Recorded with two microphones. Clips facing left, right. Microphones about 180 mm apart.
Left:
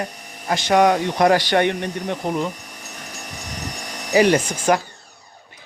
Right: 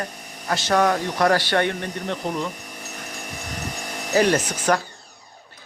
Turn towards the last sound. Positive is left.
turn(degrees=10)  # may be behind; listen again after turning